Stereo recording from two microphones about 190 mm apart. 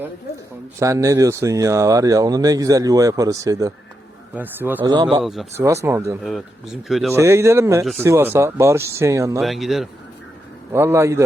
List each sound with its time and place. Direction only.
0.8 s speech: 15° right (ahead or behind)
5.5 s speech: 15° right (ahead or behind)
6.8 s speech: centre (ahead or behind)
7.1 s speech: 15° right (ahead or behind)
9.4 s speech: centre (ahead or behind)
10.7 s speech: 15° right (ahead or behind)